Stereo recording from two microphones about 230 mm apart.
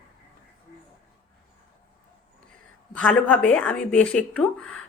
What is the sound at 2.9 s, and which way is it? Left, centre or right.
Speech, centre.